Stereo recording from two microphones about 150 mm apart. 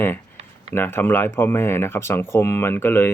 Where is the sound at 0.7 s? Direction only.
15° left (ahead or behind).